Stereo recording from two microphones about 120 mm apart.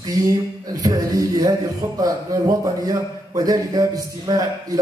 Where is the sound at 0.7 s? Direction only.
30° right (ahead or behind).